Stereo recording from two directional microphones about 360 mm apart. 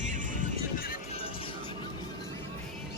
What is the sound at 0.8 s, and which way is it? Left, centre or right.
Music, centre.